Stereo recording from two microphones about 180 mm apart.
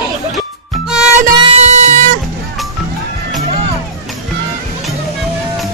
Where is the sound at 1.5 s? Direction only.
40° right (ahead or behind).